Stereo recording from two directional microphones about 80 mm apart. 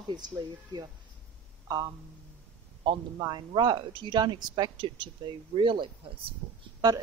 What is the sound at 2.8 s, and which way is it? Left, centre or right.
Speech, right.